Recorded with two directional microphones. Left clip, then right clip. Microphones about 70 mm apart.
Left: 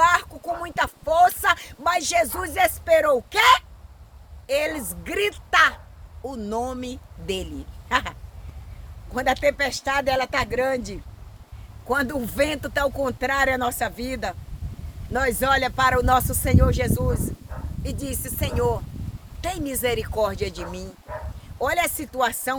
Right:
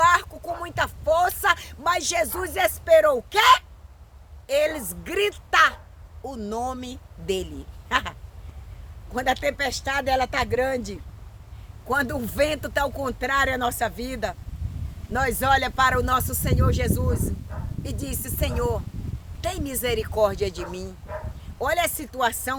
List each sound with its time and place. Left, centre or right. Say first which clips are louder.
0.0 s a sound: even; right
6.2 s speech: left 1 dB; right
7.9 s quack: left 1 dB; right
9.1 s speech: left 3 dB; right
11.9 s speech: left 1 dB; right